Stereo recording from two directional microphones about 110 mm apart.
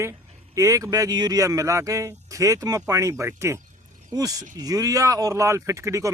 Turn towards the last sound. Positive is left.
turn(degrees=-30)  # may be behind; listen again after turning